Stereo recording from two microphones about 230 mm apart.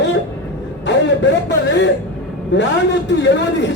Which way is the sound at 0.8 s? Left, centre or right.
Left.